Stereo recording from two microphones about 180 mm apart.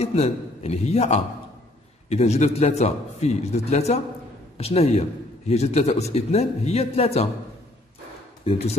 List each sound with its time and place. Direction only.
0.0 s a man's voice: 35° left (ahead or behind)
8.5 s a man's voice: 35° left (ahead or behind)